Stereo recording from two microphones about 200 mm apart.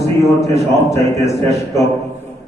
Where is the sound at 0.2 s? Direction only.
15° left (ahead or behind).